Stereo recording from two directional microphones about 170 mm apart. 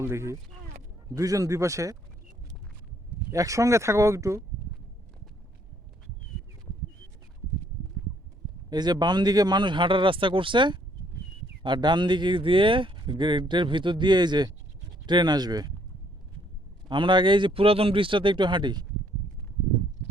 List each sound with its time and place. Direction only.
0.0 s speech: 15° right (ahead or behind)
3.3 s speech: 20° right (ahead or behind)
8.7 s speech: 25° right (ahead or behind)
16.9 s speech: 30° right (ahead or behind)